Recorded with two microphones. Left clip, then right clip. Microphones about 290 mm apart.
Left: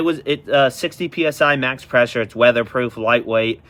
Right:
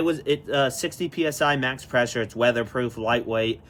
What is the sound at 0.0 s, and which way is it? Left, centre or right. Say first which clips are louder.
Speech: left 4 dB; centre.